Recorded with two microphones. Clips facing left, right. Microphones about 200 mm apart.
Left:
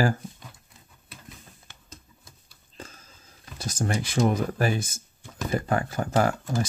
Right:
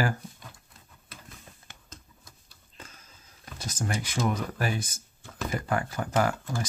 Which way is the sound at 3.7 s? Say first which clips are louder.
Left 5 dB; 30° left (ahead or behind).